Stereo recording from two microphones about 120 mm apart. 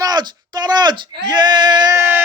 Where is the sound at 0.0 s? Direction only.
35° right (ahead or behind).